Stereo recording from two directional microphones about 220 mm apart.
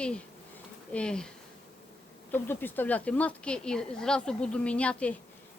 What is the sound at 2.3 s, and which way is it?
Speech, 10° left (ahead or behind).